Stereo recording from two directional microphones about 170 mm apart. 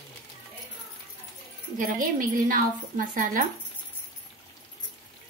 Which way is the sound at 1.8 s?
50° right (ahead or behind).